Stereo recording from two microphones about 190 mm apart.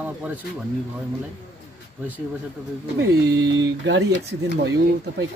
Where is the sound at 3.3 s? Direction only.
20° right (ahead or behind).